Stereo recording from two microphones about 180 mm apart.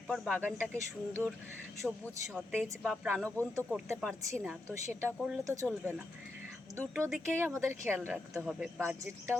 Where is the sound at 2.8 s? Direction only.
10° right (ahead or behind).